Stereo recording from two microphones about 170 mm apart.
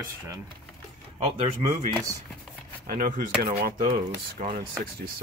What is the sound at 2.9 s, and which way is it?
Speech, 50° right (ahead or behind).